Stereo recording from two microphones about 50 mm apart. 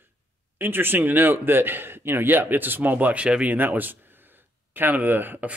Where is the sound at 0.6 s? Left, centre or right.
Right.